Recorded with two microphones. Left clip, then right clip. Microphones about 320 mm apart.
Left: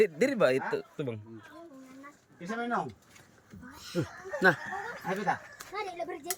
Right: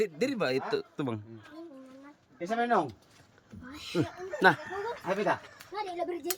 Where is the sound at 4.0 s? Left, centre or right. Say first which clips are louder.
Right 3 dB; centre.